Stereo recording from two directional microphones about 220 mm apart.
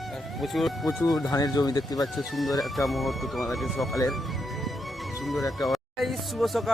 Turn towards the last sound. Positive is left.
turn(degrees=0)  # may be behind; listen again after turning